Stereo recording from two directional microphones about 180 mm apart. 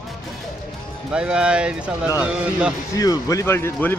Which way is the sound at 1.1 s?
5° right (ahead or behind).